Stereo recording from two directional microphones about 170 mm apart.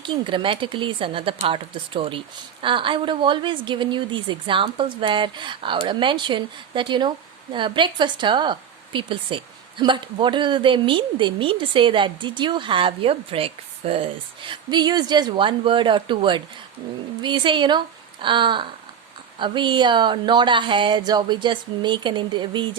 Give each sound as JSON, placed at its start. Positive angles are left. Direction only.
{"t": 0.0, "sound": "speech", "side_deg": -30}